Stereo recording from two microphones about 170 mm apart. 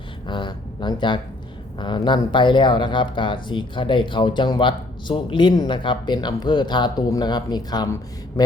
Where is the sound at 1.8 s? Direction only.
25° left (ahead or behind).